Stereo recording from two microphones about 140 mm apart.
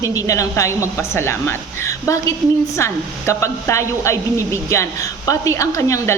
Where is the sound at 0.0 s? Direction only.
25° left (ahead or behind).